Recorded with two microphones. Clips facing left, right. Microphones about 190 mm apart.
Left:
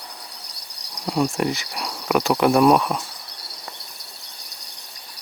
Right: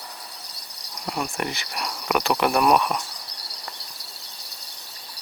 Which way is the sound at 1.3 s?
Centre (ahead or behind).